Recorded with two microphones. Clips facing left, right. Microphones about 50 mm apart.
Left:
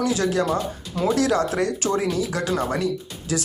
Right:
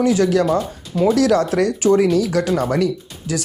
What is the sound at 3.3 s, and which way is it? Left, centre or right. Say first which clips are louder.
Speech: right 2 dB; right.